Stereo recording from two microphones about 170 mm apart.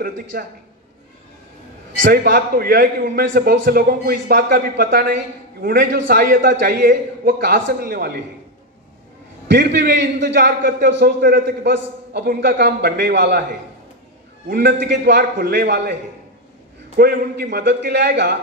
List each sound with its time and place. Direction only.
0.0 s a man's voice: 65° right (ahead or behind)
2.0 s a man's voice: 70° right (ahead or behind)
9.5 s a man's voice: 75° right (ahead or behind)
14.5 s a man's voice: 85° right
16.9 s a man's voice: 65° right (ahead or behind)